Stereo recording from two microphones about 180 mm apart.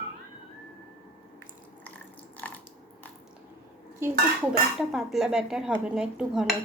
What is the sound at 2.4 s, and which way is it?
Water, 10° left (ahead or behind).